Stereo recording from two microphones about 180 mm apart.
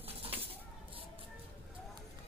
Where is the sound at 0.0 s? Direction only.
30° right (ahead or behind).